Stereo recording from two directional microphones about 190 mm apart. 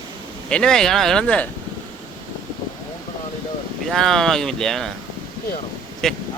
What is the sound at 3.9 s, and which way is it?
Speech, centre (ahead or behind).